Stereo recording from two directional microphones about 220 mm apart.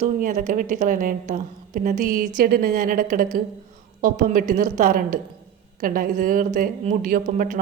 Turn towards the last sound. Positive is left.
turn(degrees=-40)  # may be behind; listen again after turning